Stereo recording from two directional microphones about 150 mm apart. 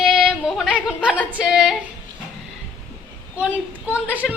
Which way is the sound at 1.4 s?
5° right (ahead or behind).